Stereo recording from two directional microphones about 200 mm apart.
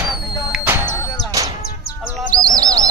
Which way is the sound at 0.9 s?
20° left (ahead or behind).